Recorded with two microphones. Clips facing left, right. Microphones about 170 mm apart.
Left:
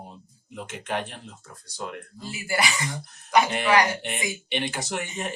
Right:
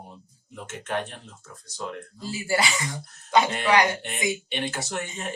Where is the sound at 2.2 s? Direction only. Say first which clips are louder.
Right 2 dB; 25° right (ahead or behind).